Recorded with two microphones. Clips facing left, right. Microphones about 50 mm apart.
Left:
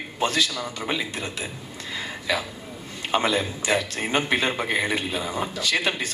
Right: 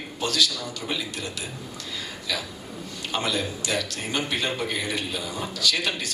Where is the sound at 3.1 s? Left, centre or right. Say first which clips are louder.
Left 4 dB; left.